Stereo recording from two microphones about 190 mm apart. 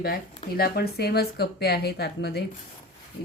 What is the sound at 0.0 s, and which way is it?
Speech, 50° left (ahead or behind).